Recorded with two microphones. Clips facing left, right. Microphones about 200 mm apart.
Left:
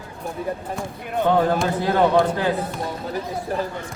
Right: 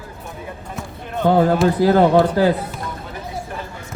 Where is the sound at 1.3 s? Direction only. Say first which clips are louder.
Right 5 dB; 35° right (ahead or behind).